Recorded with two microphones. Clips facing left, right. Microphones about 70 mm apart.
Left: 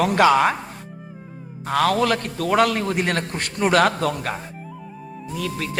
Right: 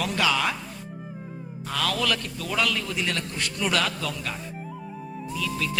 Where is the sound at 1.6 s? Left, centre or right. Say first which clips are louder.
Left 8 dB; left.